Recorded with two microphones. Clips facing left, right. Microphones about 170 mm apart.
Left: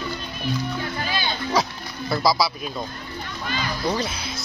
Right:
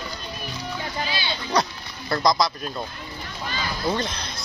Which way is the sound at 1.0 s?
45° left (ahead or behind).